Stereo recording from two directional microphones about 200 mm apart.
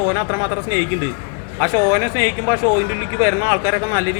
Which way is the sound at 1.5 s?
15° right (ahead or behind).